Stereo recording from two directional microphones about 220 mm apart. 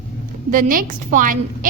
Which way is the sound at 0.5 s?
40° right (ahead or behind).